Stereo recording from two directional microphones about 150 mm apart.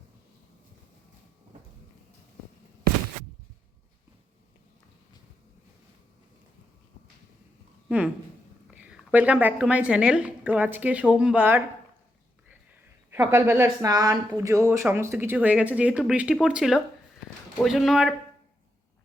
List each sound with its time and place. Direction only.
7.9 s a woman's voice: 10° right (ahead or behind)
13.1 s a woman's voice: 15° right (ahead or behind); by 18.1 s centre (ahead or behind)